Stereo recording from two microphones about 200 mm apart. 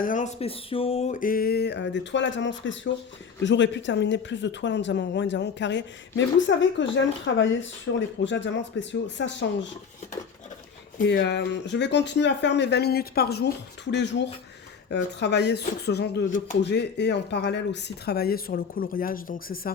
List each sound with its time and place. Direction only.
0.0 s speech: 40° left (ahead or behind); by 9.6 s 65° left (ahead or behind)
11.0 s speech: 60° left (ahead or behind)